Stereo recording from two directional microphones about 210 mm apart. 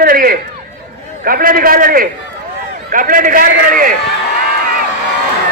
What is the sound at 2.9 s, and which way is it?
A man's voice, 40° right (ahead or behind).